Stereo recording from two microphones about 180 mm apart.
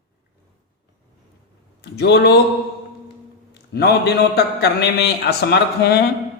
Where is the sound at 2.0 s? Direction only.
70° left (ahead or behind).